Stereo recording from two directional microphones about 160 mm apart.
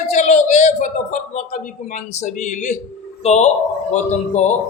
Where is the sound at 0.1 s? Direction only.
50° left (ahead or behind).